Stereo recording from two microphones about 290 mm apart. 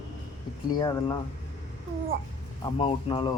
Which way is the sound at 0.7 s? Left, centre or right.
Centre.